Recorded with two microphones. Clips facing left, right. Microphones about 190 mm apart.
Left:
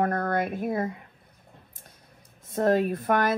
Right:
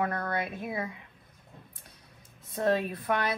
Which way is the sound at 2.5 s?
50° left (ahead or behind).